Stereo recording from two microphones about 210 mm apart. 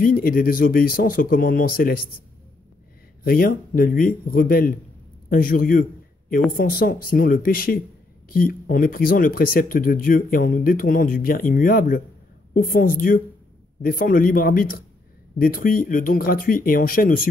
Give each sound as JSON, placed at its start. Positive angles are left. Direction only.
{"t": 0.0, "sound": "speech", "side_deg": 40}
{"t": 3.3, "sound": "a woman's voice", "side_deg": 45}